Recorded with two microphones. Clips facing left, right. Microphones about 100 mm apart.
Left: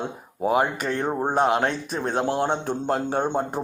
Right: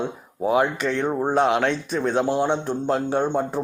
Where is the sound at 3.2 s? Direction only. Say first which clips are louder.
Right 2 dB; 15° left (ahead or behind).